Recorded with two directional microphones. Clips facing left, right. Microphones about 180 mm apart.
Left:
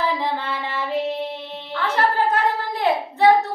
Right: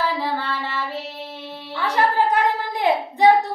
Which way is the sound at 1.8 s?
15° right (ahead or behind).